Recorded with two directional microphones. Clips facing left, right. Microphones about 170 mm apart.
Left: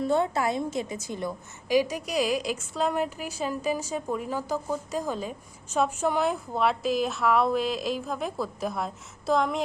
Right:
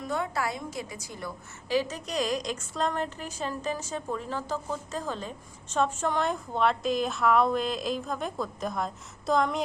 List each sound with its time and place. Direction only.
0.0 s a woman's voice: 30° left (ahead or behind); by 9.6 s centre (ahead or behind)